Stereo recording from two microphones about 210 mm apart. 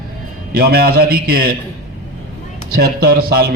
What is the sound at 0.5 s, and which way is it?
A man's voice, 45° right (ahead or behind).